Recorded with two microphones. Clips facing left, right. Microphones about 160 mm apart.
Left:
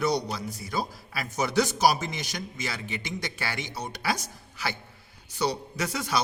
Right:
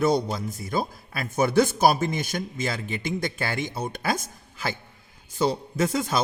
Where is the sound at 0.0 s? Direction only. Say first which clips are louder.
Right 4 dB; 50° right (ahead or behind).